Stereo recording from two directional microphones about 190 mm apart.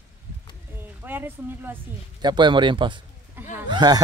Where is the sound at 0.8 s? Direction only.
10° right (ahead or behind).